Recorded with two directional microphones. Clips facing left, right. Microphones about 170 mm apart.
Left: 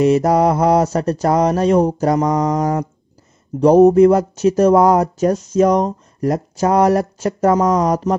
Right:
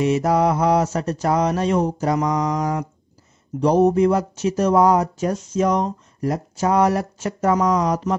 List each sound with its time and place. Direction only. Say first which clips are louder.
0.0 s speech: left 5 dB; 40° left (ahead or behind)